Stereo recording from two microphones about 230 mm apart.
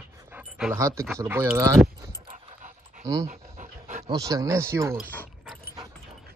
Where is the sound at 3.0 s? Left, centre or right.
Centre.